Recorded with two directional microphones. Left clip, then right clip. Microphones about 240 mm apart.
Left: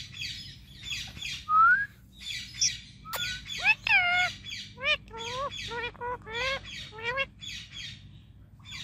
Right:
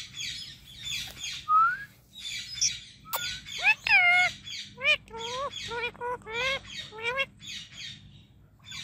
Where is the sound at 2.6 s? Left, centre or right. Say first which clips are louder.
Left 1 dB; centre.